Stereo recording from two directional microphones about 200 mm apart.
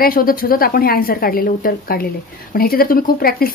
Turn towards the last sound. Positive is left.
turn(degrees=45)  # may be behind; listen again after turning